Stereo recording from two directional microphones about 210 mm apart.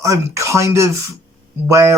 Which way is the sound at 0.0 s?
15° right (ahead or behind).